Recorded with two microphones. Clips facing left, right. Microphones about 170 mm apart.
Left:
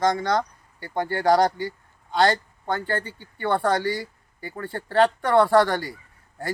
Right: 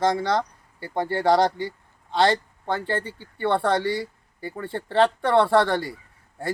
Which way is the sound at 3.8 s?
25° right (ahead or behind).